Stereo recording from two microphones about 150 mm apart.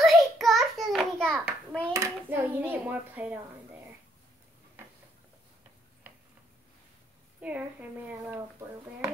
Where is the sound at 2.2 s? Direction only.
15° right (ahead or behind).